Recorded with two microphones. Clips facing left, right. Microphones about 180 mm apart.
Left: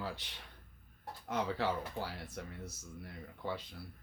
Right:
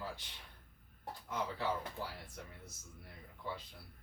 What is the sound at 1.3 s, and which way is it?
Speech, 80° left.